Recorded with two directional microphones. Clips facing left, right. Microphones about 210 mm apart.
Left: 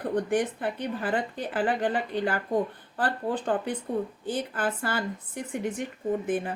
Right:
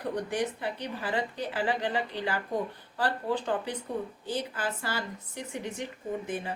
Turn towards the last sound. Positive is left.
turn(degrees=50)  # may be behind; listen again after turning